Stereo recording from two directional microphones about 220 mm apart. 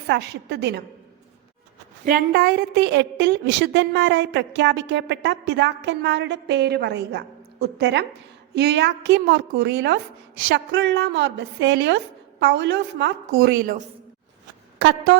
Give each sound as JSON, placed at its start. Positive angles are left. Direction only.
{"t": 0.1, "sound": "a woman's voice", "side_deg": -50}
{"t": 2.0, "sound": "a woman's voice", "side_deg": -40}
{"t": 14.8, "sound": "a woman's voice", "side_deg": -55}